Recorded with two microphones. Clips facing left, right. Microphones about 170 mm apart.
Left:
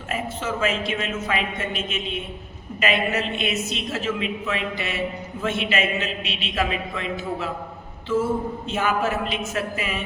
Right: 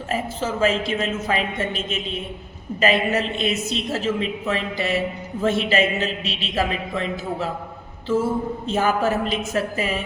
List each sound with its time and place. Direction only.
0.1 s a man's voice: 35° right (ahead or behind)
8.6 s a man's voice: 35° right (ahead or behind)